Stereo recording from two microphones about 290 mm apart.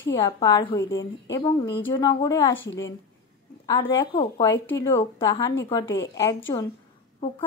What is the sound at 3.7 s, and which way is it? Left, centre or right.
Speech, centre.